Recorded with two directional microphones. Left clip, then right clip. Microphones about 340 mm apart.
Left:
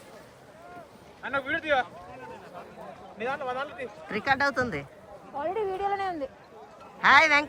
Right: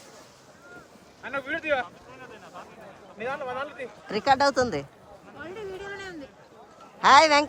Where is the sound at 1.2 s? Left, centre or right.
Centre.